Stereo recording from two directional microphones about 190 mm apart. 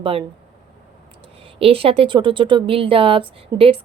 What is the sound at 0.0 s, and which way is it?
Speech, 30° right (ahead or behind).